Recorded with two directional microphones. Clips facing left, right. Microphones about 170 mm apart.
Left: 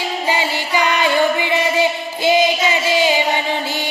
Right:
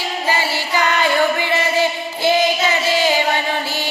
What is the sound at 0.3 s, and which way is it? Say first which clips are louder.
Music: even; 15° left (ahead or behind).